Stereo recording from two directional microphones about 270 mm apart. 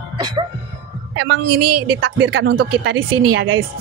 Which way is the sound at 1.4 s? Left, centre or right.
Right.